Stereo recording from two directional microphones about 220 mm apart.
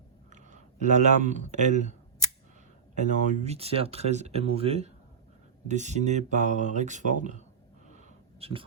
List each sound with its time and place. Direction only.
0.3 s speech: 35° right (ahead or behind)
2.9 s speech: 35° right (ahead or behind)
7.9 s a sound: 25° right (ahead or behind)